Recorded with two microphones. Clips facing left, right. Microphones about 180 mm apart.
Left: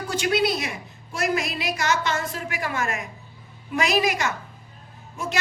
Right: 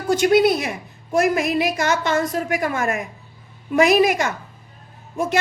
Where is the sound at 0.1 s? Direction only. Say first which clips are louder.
Right 8 dB; 50° right (ahead or behind).